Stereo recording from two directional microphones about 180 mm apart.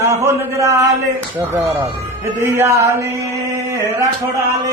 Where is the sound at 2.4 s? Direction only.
15° right (ahead or behind).